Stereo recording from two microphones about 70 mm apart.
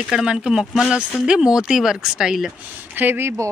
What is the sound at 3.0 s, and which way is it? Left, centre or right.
Speech, right.